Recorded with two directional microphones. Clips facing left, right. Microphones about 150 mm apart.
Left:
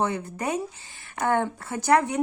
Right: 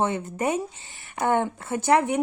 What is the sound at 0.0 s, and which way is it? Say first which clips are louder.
Speech: right 2 dB; 20° right (ahead or behind).